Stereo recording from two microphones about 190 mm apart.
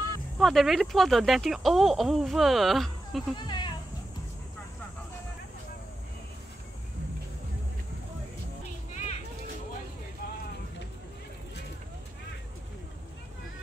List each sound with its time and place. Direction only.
0.4 s speech: centre (ahead or behind)
3.3 s speech: 25° left (ahead or behind)
8.9 s children playing: 35° left (ahead or behind)